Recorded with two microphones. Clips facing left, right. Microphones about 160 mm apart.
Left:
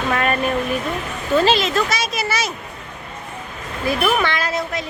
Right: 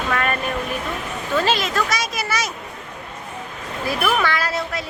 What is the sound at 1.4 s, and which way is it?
Speech, 25° left (ahead or behind).